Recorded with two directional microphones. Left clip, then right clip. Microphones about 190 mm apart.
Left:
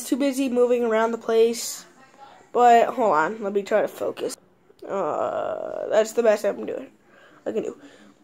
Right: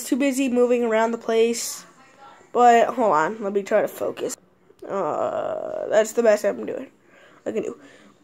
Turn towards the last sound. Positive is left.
turn(degrees=-15)  # may be behind; listen again after turning